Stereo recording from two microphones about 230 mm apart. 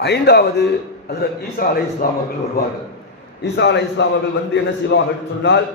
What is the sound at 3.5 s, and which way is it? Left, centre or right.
A man's voice, left.